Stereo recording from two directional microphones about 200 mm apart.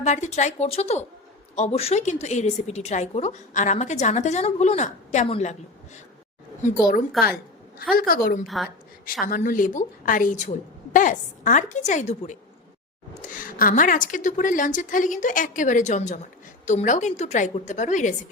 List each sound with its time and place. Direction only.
0.0 s a woman's voice: 35° left (ahead or behind)
6.6 s a woman's voice: 40° left (ahead or behind)
8.4 s a woman's voice: centre (ahead or behind)
9.2 s a woman's voice: 45° left (ahead or behind)